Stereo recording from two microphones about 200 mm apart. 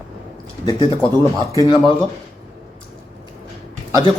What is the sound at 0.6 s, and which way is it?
Speech, 25° left (ahead or behind).